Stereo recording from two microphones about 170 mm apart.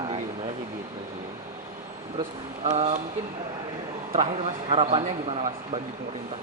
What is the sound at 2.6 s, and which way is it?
Speech, 40° right (ahead or behind).